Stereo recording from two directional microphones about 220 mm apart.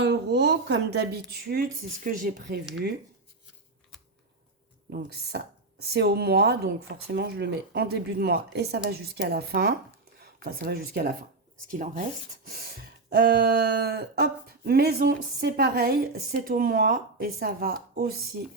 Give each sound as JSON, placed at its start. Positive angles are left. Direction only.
{"t": 0.0, "sound": "speech", "side_deg": -50}
{"t": 5.9, "sound": "speech", "side_deg": -45}
{"t": 13.1, "sound": "speech", "side_deg": -45}